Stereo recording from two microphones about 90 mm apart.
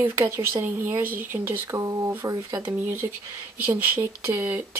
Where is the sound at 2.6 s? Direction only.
25° right (ahead or behind).